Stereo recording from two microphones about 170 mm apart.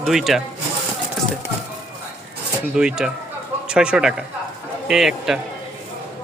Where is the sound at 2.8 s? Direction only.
5° right (ahead or behind).